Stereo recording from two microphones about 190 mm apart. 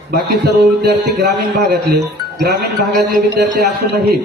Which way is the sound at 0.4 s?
60° right (ahead or behind).